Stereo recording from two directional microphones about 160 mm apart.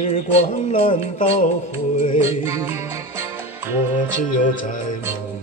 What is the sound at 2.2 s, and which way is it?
Music, 15° right (ahead or behind).